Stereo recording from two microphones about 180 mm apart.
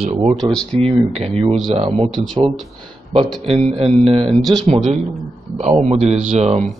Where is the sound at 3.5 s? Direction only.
35° right (ahead or behind).